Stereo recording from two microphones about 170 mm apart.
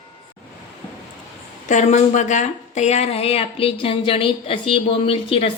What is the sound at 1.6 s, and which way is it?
A woman's voice, 45° left (ahead or behind).